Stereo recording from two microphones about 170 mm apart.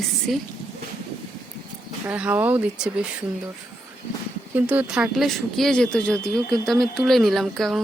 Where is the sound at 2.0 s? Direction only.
10° right (ahead or behind).